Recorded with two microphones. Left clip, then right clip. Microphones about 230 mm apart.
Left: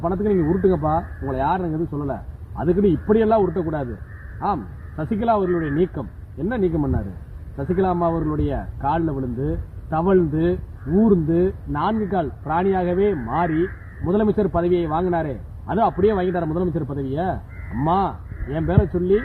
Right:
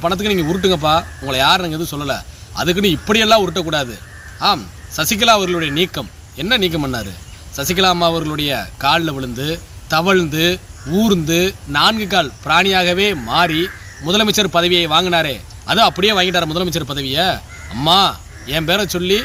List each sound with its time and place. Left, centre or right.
0.0 s a man's voice: right